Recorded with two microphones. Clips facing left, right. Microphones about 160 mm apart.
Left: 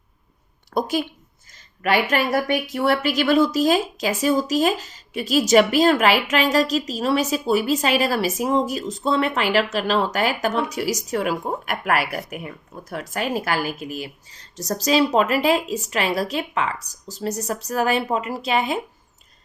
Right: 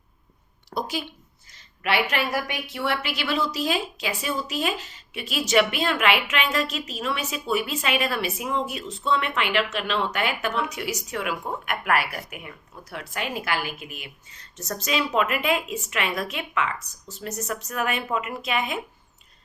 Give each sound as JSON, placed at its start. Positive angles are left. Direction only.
{"t": 0.7, "sound": "a woman's voice", "side_deg": 50}